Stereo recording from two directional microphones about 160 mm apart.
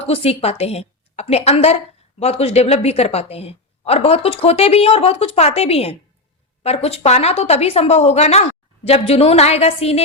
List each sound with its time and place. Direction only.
0.0 s a woman's voice: 40° left (ahead or behind)